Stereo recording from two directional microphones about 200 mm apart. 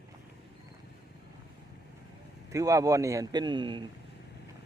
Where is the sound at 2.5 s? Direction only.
15° right (ahead or behind).